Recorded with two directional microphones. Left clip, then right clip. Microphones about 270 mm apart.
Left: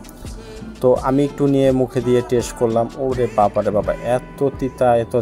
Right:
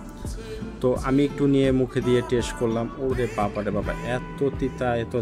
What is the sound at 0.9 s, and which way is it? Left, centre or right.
Speech, centre.